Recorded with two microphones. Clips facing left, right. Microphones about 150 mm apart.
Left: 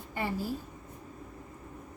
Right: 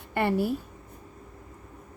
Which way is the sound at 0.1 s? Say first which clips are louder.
Right 8 dB; 70° right (ahead or behind).